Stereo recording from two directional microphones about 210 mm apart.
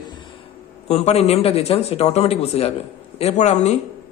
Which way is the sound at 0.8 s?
30° left (ahead or behind).